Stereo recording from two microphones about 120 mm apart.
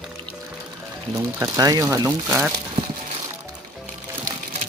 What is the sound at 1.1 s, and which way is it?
Speech, 30° right (ahead or behind).